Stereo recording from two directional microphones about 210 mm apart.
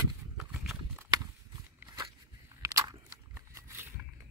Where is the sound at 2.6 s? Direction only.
15° right (ahead or behind).